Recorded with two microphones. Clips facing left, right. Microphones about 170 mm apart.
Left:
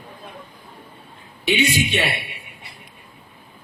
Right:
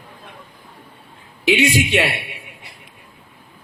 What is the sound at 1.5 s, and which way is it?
Speech, 90° right.